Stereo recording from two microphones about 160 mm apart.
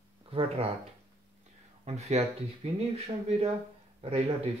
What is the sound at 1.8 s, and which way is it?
Speech, 40° right (ahead or behind).